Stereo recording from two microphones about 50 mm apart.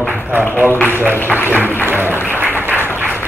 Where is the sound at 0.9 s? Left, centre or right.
Right.